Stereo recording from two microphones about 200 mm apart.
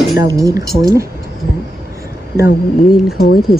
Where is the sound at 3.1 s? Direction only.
50° left (ahead or behind).